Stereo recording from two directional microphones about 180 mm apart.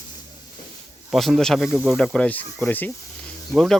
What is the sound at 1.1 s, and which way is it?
Speech, centre (ahead or behind).